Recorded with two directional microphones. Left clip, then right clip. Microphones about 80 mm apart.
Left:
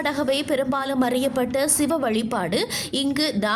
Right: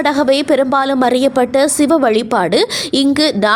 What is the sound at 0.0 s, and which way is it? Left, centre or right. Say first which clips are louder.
A woman's voice: right 10 dB; right.